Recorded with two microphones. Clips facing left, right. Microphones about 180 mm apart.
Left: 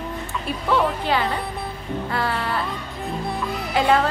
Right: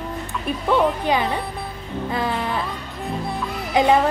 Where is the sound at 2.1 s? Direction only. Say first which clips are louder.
Right 2 dB; 20° right (ahead or behind).